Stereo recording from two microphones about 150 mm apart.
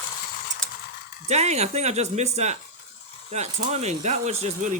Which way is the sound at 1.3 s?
45° right (ahead or behind).